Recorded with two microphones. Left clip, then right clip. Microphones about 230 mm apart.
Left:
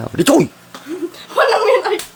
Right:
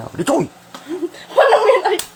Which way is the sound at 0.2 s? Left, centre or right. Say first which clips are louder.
Left 5 dB; left.